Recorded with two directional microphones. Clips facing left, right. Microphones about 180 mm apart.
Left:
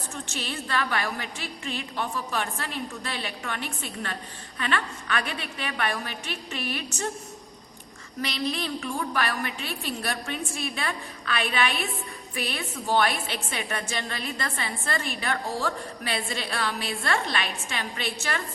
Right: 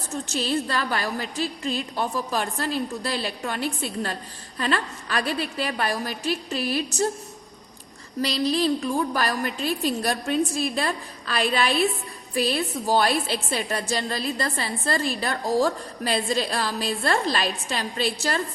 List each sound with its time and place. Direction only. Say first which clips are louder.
0.1 s a woman's voice: right 10 dB; 35° right (ahead or behind)
8.2 s a woman's voice: right 7 dB; 35° right (ahead or behind)